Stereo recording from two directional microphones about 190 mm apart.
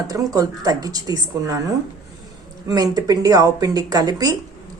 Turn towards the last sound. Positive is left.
turn(degrees=-20)  # may be behind; listen again after turning